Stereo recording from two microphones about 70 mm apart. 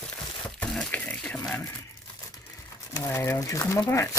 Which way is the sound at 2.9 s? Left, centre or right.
Left.